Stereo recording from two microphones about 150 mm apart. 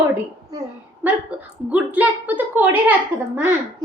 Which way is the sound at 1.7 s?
10° right (ahead or behind).